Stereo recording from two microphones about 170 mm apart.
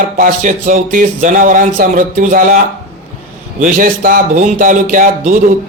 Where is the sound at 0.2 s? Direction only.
55° right (ahead or behind).